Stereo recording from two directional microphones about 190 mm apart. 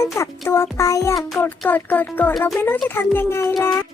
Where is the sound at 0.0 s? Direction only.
15° left (ahead or behind).